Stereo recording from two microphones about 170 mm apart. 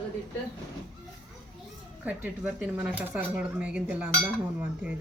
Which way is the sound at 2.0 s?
5° right (ahead or behind).